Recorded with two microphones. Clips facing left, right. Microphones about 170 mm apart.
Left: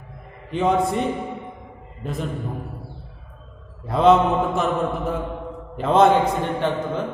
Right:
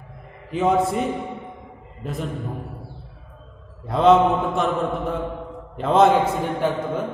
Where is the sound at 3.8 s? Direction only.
Centre (ahead or behind).